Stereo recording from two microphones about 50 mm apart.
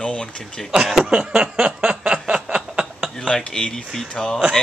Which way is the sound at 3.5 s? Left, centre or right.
Centre.